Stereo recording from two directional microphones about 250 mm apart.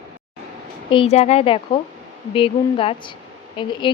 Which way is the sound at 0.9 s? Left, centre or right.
Left.